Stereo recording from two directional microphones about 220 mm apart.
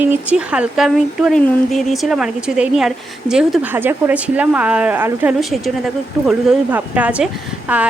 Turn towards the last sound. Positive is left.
turn(degrees=-5)  # may be behind; listen again after turning